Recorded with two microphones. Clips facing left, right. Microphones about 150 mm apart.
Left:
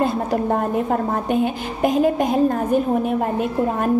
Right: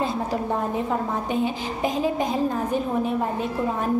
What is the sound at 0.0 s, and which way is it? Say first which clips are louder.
A woman's voice: left 5 dB; 55° left (ahead or behind).